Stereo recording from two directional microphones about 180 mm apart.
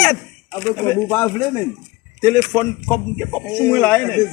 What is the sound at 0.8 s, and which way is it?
A man's voice, 15° left (ahead or behind).